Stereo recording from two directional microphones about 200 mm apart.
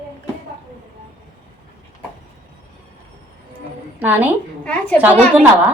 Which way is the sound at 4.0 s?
10° right (ahead or behind).